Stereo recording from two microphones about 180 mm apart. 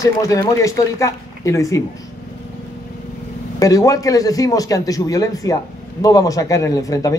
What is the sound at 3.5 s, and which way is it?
A man's voice, 20° left (ahead or behind).